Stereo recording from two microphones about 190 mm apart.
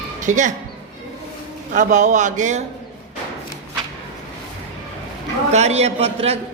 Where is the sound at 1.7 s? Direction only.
40° right (ahead or behind).